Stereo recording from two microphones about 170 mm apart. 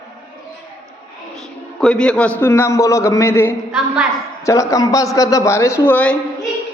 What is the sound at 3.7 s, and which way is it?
Speech, 5° right (ahead or behind).